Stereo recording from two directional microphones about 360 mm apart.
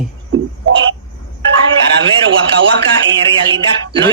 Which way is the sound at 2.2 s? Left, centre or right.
Right.